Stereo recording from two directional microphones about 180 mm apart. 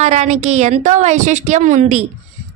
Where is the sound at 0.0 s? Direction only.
40° right (ahead or behind).